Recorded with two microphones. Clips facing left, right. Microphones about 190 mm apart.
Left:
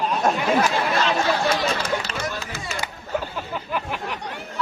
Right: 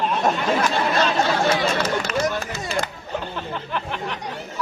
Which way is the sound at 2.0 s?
50° right (ahead or behind).